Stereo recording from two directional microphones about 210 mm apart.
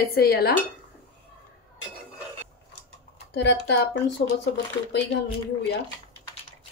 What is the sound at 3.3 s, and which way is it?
Speech, 55° left (ahead or behind).